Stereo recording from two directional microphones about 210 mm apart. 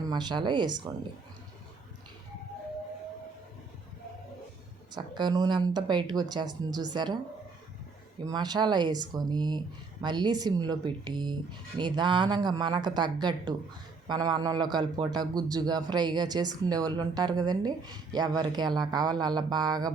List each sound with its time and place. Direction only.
0.1 s a man's voice: 20° right (ahead or behind)
4.9 s a man's voice: 20° right (ahead or behind)
8.2 s a man's voice: 20° right (ahead or behind)